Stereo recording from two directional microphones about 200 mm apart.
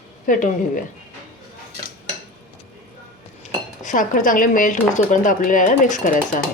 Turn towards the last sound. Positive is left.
turn(degrees=40)  # may be behind; listen again after turning